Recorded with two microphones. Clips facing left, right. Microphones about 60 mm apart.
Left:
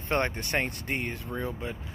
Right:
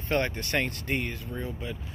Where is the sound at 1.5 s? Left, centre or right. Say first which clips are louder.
Left 1 dB; left.